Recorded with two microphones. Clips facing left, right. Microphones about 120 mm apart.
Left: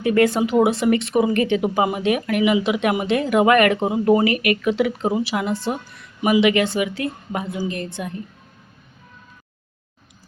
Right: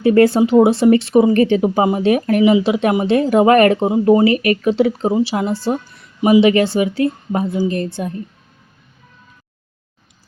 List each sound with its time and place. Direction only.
0.0 s speech: 30° right (ahead or behind)